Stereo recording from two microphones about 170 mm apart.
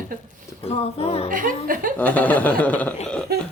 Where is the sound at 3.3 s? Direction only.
70° right (ahead or behind).